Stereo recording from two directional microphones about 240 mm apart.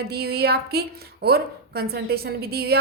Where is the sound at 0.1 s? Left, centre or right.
Right.